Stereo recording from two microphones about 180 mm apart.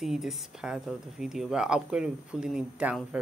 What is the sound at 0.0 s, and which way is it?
Speech, centre (ahead or behind).